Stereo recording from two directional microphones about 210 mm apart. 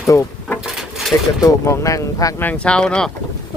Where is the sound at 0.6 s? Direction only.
Centre (ahead or behind).